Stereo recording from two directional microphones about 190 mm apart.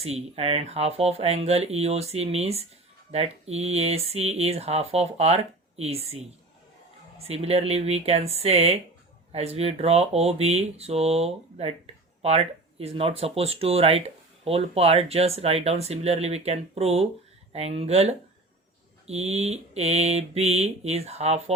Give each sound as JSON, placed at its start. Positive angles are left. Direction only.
{"t": 0.0, "sound": "speech", "side_deg": -30}
{"t": 6.0, "sound": "a woman's voice", "side_deg": -90}
{"t": 7.3, "sound": "speech", "side_deg": -30}